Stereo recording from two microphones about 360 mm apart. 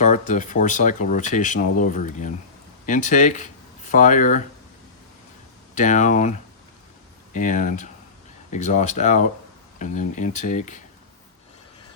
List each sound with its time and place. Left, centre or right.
0.0 s speech: left
5.7 s speech: left
7.3 s speech: left